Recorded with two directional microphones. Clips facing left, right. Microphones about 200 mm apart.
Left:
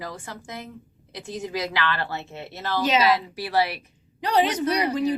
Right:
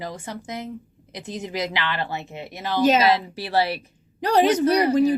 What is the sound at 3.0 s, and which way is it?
Speech, 25° right (ahead or behind).